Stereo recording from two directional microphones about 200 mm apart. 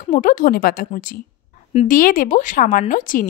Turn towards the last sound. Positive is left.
turn(degrees=40)  # may be behind; listen again after turning